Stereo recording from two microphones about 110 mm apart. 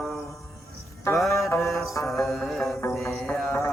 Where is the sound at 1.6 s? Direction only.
Centre (ahead or behind).